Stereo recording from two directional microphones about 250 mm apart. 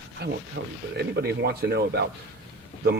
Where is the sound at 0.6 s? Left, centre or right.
Right.